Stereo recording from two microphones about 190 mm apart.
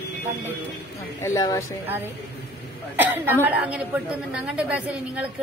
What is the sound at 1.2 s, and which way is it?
Speech, 15° left (ahead or behind).